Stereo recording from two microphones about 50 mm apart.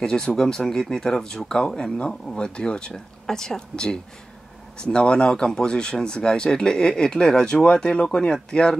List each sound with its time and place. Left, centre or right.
0.0 s speech: centre